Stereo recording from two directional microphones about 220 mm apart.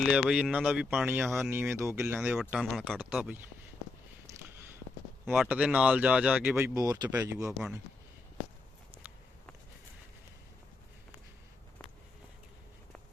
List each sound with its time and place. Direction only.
0.0 s speech: centre (ahead or behind)
5.2 s speech: centre (ahead or behind)